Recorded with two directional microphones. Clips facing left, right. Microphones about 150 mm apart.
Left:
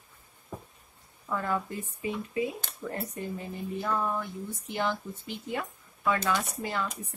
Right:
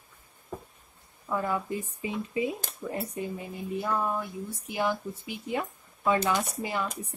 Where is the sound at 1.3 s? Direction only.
10° right (ahead or behind).